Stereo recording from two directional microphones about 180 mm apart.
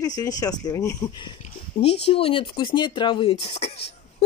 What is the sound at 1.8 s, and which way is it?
Speech, 40° left (ahead or behind).